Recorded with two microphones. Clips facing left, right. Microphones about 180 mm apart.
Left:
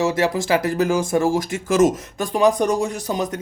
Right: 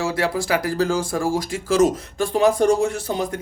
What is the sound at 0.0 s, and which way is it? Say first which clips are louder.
Speech: left 3 dB; 20° left (ahead or behind).